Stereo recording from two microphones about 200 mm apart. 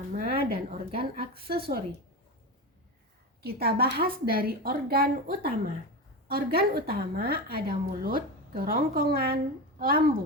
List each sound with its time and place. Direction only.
0.1 s a woman's voice: 45° right (ahead or behind)
3.4 s a woman's voice: 50° right (ahead or behind)